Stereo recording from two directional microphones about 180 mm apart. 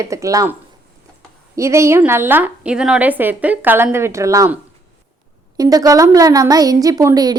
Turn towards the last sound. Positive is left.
turn(degrees=-20)  # may be behind; listen again after turning